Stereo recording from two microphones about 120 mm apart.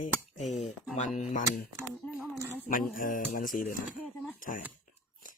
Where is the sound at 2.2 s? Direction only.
20° right (ahead or behind).